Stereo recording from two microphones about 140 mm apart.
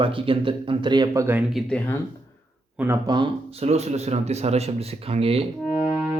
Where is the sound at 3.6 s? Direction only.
50° right (ahead or behind).